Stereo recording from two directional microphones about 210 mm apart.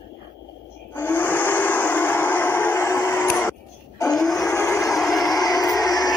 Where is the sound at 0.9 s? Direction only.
10° left (ahead or behind).